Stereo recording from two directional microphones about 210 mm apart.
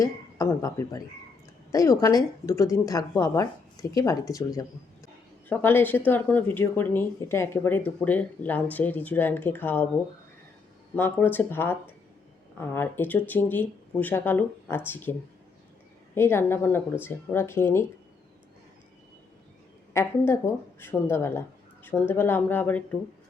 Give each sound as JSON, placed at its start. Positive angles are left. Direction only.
{"t": 0.0, "sound": "a woman's voice", "side_deg": 15}
{"t": 10.9, "sound": "a woman's voice", "side_deg": 10}
{"t": 16.1, "sound": "a woman's voice", "side_deg": 10}
{"t": 19.9, "sound": "a woman's voice", "side_deg": 15}